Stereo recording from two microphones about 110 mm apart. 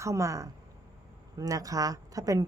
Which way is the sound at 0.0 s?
30° right (ahead or behind).